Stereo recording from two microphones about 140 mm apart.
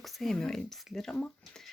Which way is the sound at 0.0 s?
Centre (ahead or behind).